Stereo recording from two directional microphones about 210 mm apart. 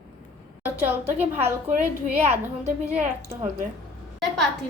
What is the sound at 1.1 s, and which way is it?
Speech, 10° right (ahead or behind).